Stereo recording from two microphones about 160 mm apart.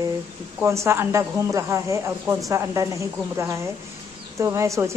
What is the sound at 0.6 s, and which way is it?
A woman's voice, 15° right (ahead or behind).